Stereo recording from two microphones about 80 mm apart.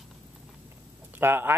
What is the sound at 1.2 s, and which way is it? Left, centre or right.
Speech, right.